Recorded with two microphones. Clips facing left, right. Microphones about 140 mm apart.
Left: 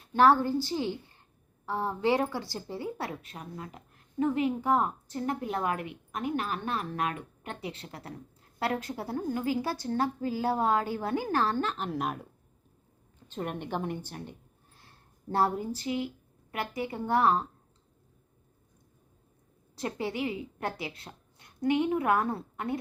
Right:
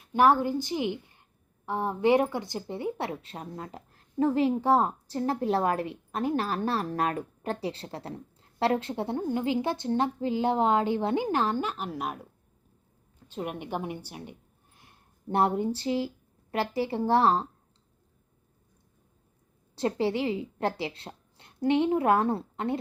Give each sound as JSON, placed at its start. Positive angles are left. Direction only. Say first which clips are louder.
{"t": 0.1, "sound": "a woman's voice", "louder": "even", "side_deg": -15}
{"t": 19.7, "sound": "a woman's voice", "louder": "right 6 dB", "side_deg": -30}